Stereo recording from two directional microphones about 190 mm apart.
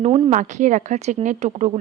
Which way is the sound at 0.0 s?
35° right (ahead or behind).